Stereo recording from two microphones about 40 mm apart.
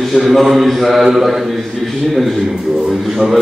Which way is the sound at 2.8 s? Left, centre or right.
Centre.